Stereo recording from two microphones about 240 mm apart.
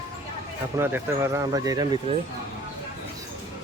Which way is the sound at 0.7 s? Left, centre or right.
Centre.